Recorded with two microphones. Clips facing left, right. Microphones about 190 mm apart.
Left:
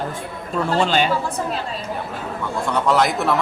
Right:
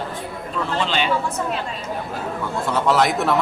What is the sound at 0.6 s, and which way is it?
Speech, 40° left (ahead or behind).